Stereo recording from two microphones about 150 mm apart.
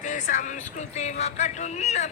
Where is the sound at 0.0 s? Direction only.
55° left (ahead or behind).